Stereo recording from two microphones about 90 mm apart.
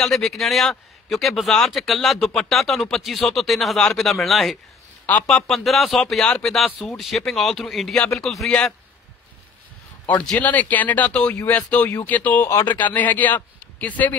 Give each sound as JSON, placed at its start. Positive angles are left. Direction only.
{"t": 0.0, "sound": "a man's voice", "side_deg": 0}
{"t": 10.4, "sound": "speech", "side_deg": 20}
{"t": 12.4, "sound": "speech", "side_deg": 30}
{"t": 12.7, "sound": "a man's voice", "side_deg": 20}